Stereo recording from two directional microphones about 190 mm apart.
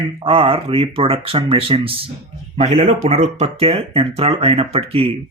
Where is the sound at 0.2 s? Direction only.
30° right (ahead or behind).